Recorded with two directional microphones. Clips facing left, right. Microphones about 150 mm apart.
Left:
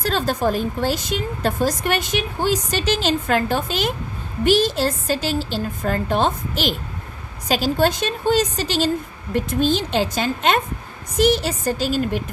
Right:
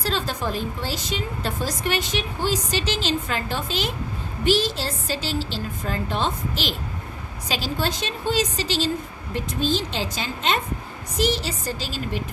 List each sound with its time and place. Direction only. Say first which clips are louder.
0.0 s a woman's voice: left 6 dB; 50° left (ahead or behind)